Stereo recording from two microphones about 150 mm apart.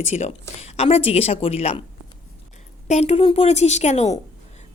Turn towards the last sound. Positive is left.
turn(degrees=50)  # may be behind; listen again after turning